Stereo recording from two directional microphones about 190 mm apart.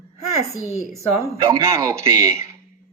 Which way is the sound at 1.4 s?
15° right (ahead or behind).